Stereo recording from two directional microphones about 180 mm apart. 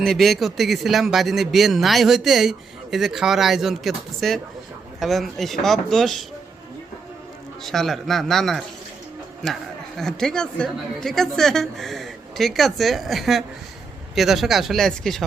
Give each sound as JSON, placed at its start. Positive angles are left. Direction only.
{"t": 0.0, "sound": "a man's voice", "side_deg": 0}
{"t": 7.6, "sound": "a man's voice", "side_deg": 0}
{"t": 10.0, "sound": "a man's voice", "side_deg": 5}